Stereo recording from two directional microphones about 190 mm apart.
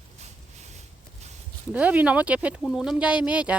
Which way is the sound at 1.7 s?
5° right (ahead or behind).